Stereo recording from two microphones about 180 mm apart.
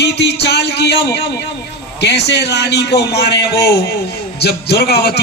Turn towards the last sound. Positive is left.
turn(degrees=60)  # may be behind; listen again after turning